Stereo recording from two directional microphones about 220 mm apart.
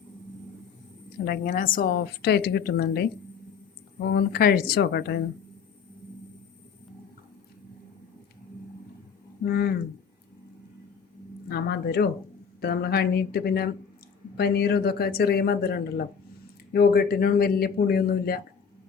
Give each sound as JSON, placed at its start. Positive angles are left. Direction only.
{"t": 1.2, "sound": "a woman's voice", "side_deg": 40}
{"t": 4.1, "sound": "a woman's voice", "side_deg": 45}
{"t": 9.5, "sound": "a woman's voice", "side_deg": 45}
{"t": 11.4, "sound": "a woman's voice", "side_deg": 45}